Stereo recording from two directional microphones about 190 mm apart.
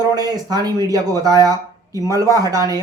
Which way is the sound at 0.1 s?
20° right (ahead or behind).